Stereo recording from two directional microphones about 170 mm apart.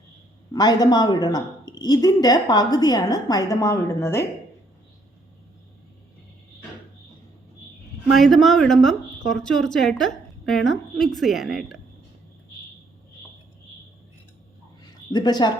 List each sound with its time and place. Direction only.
0.5 s a woman's voice: 25° left (ahead or behind)
8.1 s a woman's voice: centre (ahead or behind)
15.1 s a woman's voice: 25° left (ahead or behind)